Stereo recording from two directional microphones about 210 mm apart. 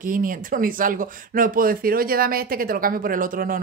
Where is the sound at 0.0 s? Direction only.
40° right (ahead or behind).